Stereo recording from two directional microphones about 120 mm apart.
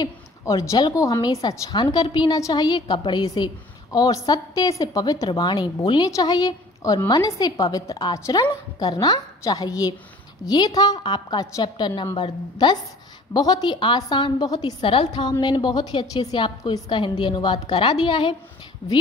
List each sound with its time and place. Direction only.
0.0 s a woman's voice: 30° left (ahead or behind); by 18.3 s 45° left (ahead or behind)